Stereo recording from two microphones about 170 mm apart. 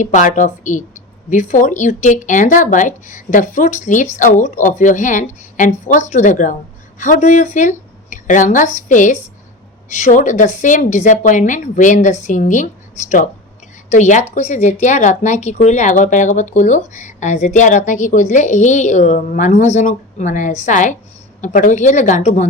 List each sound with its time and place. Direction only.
0.0 s speech: 50° left (ahead or behind)